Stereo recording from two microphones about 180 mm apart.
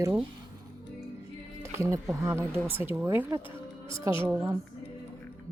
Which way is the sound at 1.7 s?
15° right (ahead or behind).